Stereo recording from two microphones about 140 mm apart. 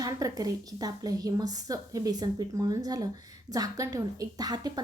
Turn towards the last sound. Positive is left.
turn(degrees=-30)  # may be behind; listen again after turning